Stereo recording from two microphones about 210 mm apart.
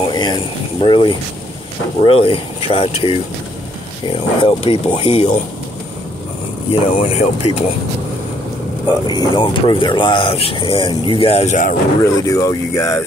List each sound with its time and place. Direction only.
0.1 s speech: 20° left (ahead or behind)
4.4 s speech: 25° left (ahead or behind)
6.7 s speech: 30° left (ahead or behind)
8.8 s speech: 20° left (ahead or behind); by 11.7 s 35° left (ahead or behind)
12.0 s speech: 15° left (ahead or behind)